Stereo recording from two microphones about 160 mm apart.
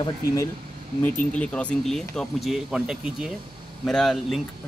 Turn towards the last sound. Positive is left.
turn(degrees=0)  # may be behind; listen again after turning